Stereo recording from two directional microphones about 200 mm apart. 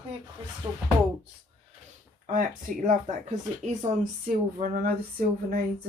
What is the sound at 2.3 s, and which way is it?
Speech, 40° right (ahead or behind).